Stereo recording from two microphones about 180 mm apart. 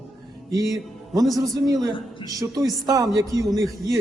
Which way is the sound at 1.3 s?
Centre (ahead or behind).